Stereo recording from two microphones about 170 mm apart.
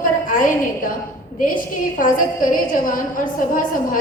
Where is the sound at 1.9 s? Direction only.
55° left (ahead or behind).